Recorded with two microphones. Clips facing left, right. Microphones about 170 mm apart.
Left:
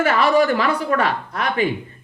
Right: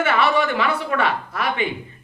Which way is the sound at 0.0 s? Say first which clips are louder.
Left 3 dB; 40° left (ahead or behind).